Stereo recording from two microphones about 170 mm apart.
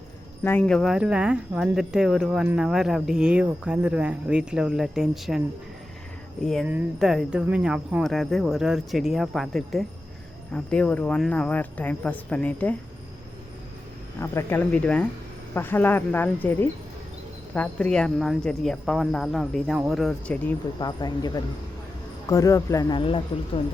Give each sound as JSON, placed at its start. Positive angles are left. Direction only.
{"t": 0.4, "sound": "speech", "side_deg": 10}
{"t": 0.8, "sound": "speech", "side_deg": -5}
{"t": 6.4, "sound": "speech", "side_deg": 0}
{"t": 14.2, "sound": "speech", "side_deg": 15}
{"t": 20.7, "sound": "speech", "side_deg": 25}